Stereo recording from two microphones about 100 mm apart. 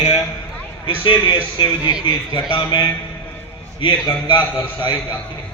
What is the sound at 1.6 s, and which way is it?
A man's voice, 50° left (ahead or behind).